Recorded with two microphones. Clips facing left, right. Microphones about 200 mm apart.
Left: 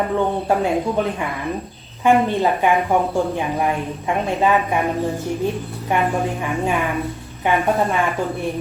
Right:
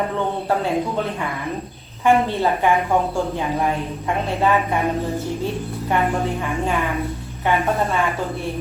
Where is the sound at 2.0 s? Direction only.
15° left (ahead or behind).